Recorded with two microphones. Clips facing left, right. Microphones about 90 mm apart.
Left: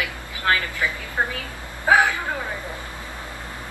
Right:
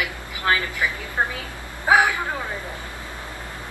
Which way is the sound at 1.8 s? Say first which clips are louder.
Even; 20° right (ahead or behind).